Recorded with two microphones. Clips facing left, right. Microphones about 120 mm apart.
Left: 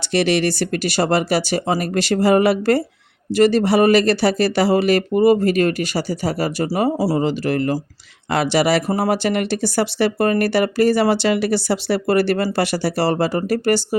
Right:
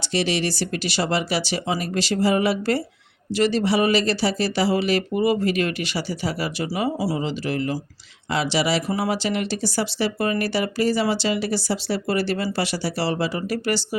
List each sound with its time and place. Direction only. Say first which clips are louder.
0.0 s speech: left 6 dB; 60° left (ahead or behind); by 7.2 s 35° left (ahead or behind)
7.2 s speech: left 6 dB; 50° left (ahead or behind)